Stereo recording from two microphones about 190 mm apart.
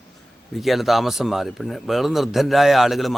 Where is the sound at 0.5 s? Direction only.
Centre (ahead or behind).